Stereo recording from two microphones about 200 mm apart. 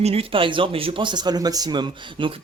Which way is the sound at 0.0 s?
30° right (ahead or behind).